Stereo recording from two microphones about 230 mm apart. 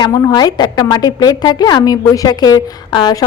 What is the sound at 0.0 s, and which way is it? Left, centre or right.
A woman's voice, centre.